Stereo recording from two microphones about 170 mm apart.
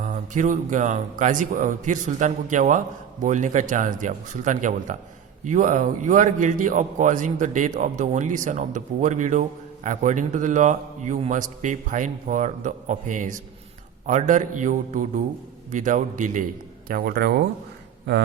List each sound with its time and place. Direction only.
0.0 s a man's voice: 45° right (ahead or behind)
16.9 s speech: 60° right (ahead or behind)